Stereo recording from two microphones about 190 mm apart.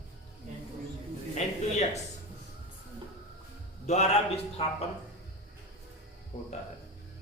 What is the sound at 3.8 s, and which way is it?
Speech, 35° left (ahead or behind).